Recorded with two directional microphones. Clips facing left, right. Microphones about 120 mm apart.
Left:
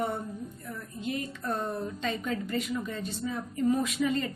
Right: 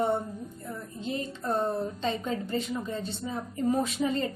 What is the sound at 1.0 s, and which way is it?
A woman's voice, 30° right (ahead or behind).